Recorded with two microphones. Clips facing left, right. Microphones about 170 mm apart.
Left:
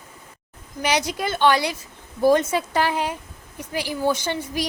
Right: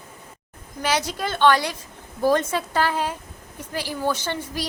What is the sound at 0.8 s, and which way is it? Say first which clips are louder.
A woman's voice: left 1 dB; 15° left (ahead or behind).